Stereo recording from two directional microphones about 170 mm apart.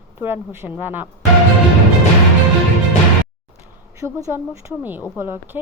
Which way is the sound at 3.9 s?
15° right (ahead or behind).